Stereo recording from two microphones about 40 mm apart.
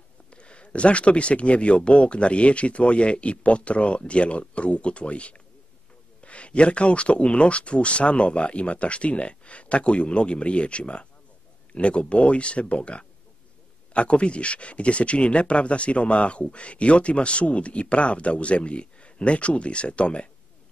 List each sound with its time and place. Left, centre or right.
0.3 s speech: left